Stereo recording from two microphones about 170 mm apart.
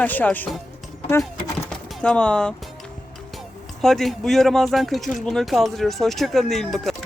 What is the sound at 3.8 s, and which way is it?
Speech, centre (ahead or behind).